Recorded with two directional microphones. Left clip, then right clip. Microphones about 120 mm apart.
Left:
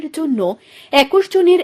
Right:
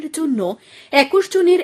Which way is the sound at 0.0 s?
10° left (ahead or behind).